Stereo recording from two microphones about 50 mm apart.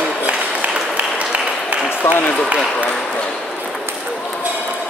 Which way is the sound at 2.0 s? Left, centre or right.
Left.